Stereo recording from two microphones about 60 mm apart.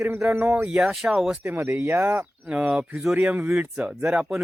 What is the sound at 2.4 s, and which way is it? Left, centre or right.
Speech, centre.